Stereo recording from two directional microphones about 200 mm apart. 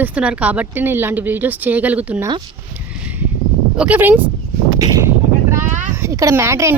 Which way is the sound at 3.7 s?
5° right (ahead or behind).